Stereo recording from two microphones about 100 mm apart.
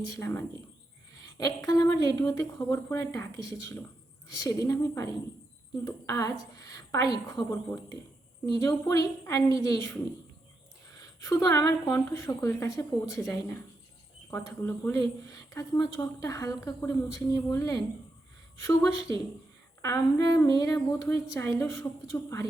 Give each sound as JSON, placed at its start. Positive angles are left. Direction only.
{"t": 0.1, "sound": "a woman's voice", "side_deg": 30}
{"t": 11.9, "sound": "a woman's voice", "side_deg": 25}
{"t": 15.3, "sound": "a woman's voice", "side_deg": 35}